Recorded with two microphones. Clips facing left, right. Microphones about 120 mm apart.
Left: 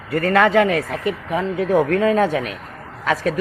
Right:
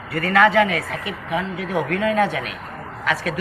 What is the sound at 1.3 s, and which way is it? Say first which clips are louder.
Speech: left 5 dB; 45° left (ahead or behind).